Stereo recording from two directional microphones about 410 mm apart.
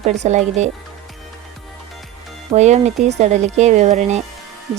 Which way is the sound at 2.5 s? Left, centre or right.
Centre.